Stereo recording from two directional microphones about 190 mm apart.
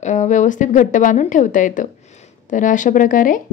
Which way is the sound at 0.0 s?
40° left (ahead or behind).